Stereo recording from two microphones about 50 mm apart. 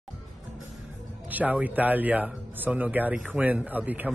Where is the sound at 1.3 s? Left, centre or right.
Right.